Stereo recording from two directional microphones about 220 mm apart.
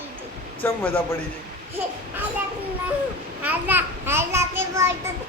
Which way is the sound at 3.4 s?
10° right (ahead or behind).